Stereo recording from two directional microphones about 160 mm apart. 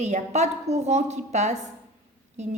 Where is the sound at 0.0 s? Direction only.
45° right (ahead or behind).